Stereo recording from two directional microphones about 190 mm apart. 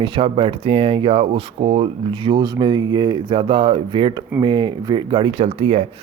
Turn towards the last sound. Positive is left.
turn(degrees=-30)  # may be behind; listen again after turning